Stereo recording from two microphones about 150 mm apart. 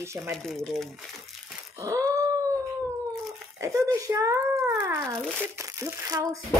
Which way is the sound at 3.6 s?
20° right (ahead or behind).